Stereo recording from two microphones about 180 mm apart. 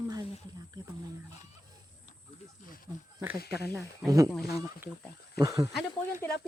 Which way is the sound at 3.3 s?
60° left (ahead or behind).